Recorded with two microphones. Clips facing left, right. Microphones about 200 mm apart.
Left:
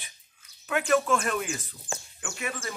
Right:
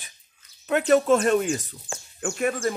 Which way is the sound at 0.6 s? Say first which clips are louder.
Right 6 dB; 35° right (ahead or behind).